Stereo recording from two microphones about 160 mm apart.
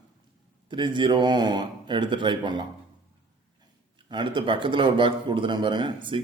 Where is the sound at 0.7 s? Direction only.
30° right (ahead or behind).